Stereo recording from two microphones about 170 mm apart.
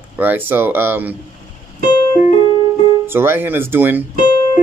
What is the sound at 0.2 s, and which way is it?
Speech, 10° right (ahead or behind).